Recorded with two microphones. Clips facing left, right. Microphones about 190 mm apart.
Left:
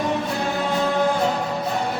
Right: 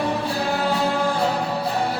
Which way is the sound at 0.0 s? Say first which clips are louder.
Even; 35° right (ahead or behind).